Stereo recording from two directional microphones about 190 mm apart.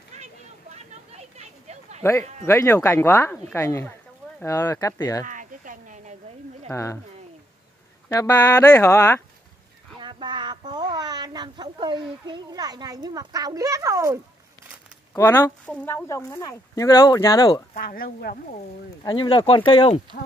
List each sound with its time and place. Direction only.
0.1 s a sound: 35° right (ahead or behind)
2.4 s speech: 15° left (ahead or behind)
5.2 s a sound: 45° right (ahead or behind)
6.7 s speech: 15° left (ahead or behind)
8.1 s speech: 15° left (ahead or behind)
9.9 s speech: 25° right (ahead or behind)
15.1 s speech: 15° left (ahead or behind)
17.7 s speech: 50° left (ahead or behind)
19.0 s speech: 25° left (ahead or behind)